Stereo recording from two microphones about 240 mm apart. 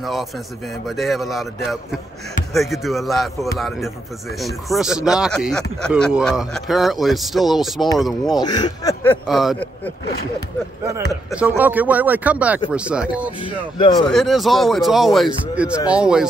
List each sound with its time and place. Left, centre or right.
0.0 s speech: centre
8.4 s speech: centre
11.2 s speech: centre
13.4 s speech: left
14.1 s speech: centre